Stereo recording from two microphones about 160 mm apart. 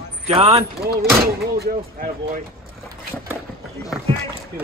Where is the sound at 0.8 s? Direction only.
75° right (ahead or behind).